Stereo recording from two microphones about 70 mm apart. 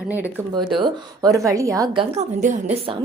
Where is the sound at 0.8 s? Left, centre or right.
Right.